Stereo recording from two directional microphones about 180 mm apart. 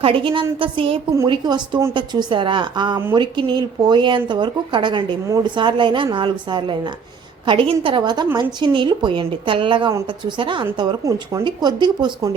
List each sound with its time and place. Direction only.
0.0 s speech: 30° right (ahead or behind)